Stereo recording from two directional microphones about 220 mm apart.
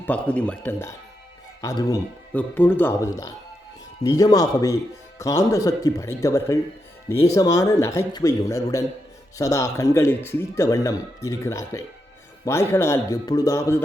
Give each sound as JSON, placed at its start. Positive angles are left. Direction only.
{"t": 0.0, "sound": "speech", "side_deg": 5}